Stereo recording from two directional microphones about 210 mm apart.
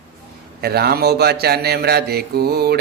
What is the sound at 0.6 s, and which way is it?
Mantra, 50° right (ahead or behind).